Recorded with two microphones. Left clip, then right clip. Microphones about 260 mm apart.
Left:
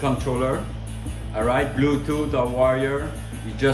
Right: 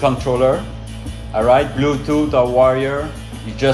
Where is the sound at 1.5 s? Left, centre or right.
Centre.